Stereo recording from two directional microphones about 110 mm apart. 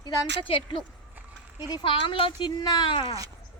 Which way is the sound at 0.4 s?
50° left (ahead or behind).